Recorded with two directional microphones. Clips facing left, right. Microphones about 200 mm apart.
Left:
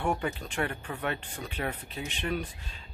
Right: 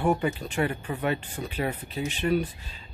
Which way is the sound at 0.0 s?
5° right (ahead or behind).